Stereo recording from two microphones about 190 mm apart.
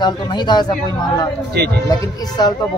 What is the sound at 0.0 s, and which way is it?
Speech, 25° left (ahead or behind).